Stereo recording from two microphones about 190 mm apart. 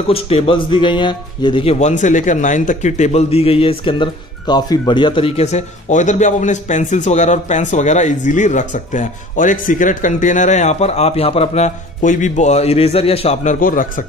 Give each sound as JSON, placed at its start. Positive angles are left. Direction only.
{"t": 0.1, "sound": "speech", "side_deg": 30}